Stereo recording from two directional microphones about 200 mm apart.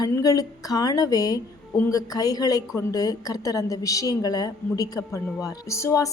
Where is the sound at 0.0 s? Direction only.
20° left (ahead or behind).